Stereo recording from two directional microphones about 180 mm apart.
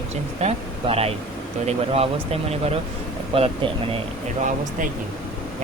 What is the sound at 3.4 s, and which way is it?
Speech, 30° right (ahead or behind).